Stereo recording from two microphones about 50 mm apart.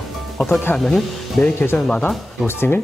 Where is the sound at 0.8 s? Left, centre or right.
Centre.